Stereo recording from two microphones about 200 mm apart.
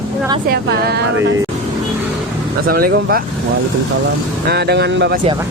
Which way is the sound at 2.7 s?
50° right (ahead or behind).